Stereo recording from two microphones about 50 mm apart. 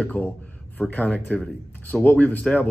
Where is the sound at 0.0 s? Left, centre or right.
Left.